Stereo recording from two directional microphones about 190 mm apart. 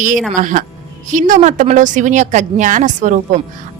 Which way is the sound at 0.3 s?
40° right (ahead or behind).